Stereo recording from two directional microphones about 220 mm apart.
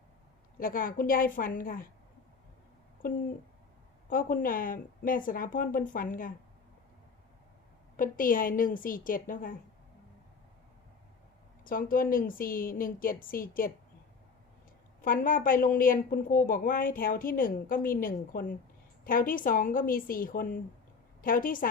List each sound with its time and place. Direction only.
0.6 s a woman's voice: 40° left (ahead or behind)
3.0 s a woman's voice: 40° left (ahead or behind)
7.9 s a woman's voice: 40° left (ahead or behind)
11.6 s a woman's voice: 40° left (ahead or behind)
15.0 s a woman's voice: 40° left (ahead or behind)